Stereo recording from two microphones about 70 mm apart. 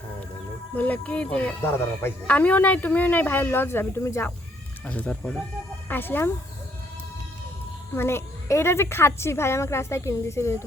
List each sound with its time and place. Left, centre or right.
0.8 s speech: left
1.6 s a woman's voice: left
2.2 s speech: left
4.9 s speech: centre
5.9 s speech: left
7.9 s a woman's voice: left